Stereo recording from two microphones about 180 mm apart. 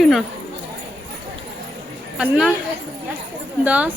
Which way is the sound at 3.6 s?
10° right (ahead or behind).